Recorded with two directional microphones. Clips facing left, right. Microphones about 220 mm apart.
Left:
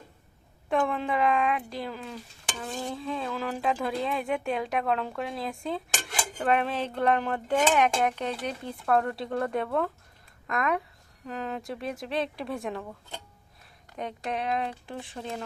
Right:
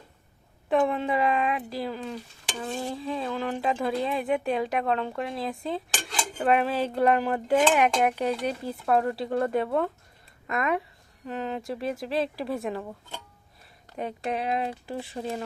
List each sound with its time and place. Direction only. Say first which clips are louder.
0.7 s speech: right 3 dB; centre (ahead or behind)
6.3 s dishes: right 3 dB; 5° right (ahead or behind)
8.4 s speech: right 2 dB; 5° right (ahead or behind)
14.0 s speech: right 2 dB; 5° right (ahead or behind)
15.0 s dishes: right 3 dB; 5° right (ahead or behind)